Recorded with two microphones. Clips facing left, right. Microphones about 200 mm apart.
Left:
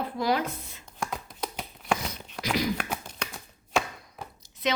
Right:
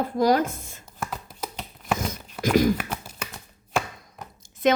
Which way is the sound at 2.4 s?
50° right (ahead or behind).